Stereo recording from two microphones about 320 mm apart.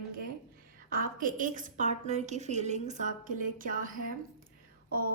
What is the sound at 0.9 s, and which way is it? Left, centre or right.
A woman's voice, right.